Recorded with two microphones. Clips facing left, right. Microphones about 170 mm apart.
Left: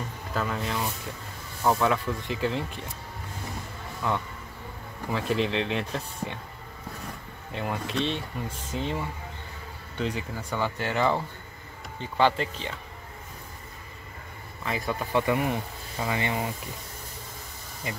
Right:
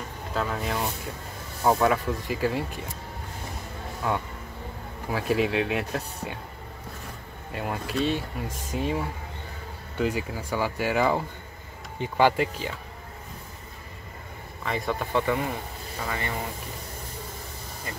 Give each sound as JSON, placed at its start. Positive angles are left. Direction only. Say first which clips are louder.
{"t": 0.3, "sound": "speech", "louder": "right 1 dB", "side_deg": 0}
{"t": 5.1, "sound": "speech", "louder": "right 2 dB", "side_deg": -5}
{"t": 7.5, "sound": "speech", "louder": "right 1 dB", "side_deg": -5}
{"t": 14.6, "sound": "speech", "louder": "right 1 dB", "side_deg": 0}
{"t": 15.1, "sound": "speech", "louder": "left 2 dB", "side_deg": 15}